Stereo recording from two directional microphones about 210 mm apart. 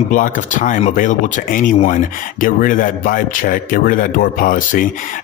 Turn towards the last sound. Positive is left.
turn(degrees=40)  # may be behind; listen again after turning